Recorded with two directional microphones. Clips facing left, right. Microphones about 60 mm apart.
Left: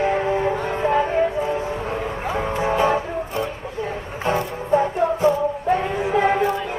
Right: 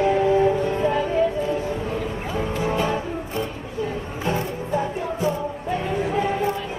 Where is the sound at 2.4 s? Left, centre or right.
Left.